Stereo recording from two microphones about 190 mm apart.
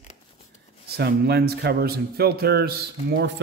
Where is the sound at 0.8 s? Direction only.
60° right (ahead or behind).